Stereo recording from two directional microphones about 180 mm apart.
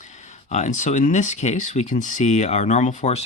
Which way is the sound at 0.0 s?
40° left (ahead or behind).